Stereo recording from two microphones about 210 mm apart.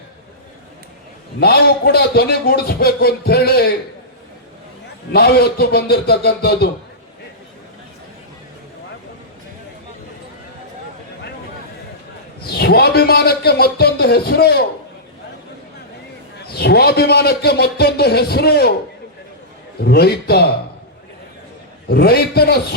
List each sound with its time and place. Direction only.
1.4 s a man's voice: 50° left (ahead or behind)
5.1 s a man's voice: 50° left (ahead or behind)
12.5 s a man's voice: 50° left (ahead or behind)
16.5 s a man's voice: 50° left (ahead or behind)
19.8 s a man's voice: 50° left (ahead or behind)
21.8 s a man's voice: 45° left (ahead or behind)